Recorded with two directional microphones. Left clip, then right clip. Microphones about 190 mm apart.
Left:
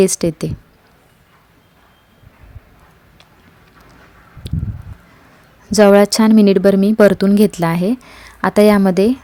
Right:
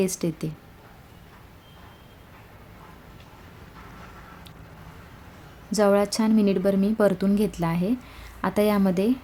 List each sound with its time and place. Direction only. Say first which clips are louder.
0.0 s a woman's voice: left 12 dB; 40° left (ahead or behind)
4.4 s a sound: left 16 dB; 40° left (ahead or behind)
5.7 s a woman's voice: left 11 dB; 45° left (ahead or behind)